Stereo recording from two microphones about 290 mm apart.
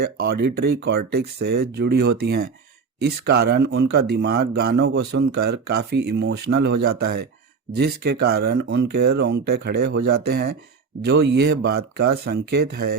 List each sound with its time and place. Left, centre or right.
0.0 s speech: right